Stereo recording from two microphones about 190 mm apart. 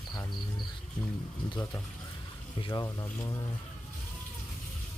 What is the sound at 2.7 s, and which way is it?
Speech, 20° left (ahead or behind).